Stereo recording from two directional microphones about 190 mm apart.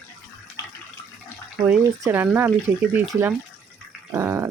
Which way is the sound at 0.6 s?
15° left (ahead or behind).